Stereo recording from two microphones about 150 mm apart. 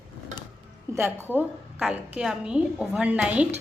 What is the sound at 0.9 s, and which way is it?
A woman's voice, 15° right (ahead or behind).